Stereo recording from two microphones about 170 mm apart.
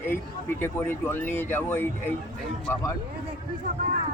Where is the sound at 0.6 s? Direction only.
10° left (ahead or behind).